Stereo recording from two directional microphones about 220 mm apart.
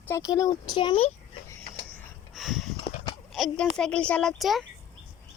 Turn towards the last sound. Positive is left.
turn(degrees=0)  # may be behind; listen again after turning